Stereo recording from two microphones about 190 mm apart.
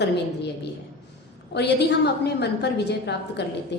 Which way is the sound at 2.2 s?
60° left (ahead or behind).